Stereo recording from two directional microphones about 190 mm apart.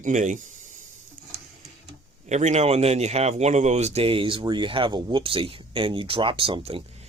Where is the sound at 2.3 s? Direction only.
35° right (ahead or behind).